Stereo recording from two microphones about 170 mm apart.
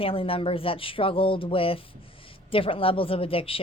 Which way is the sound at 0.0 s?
35° left (ahead or behind).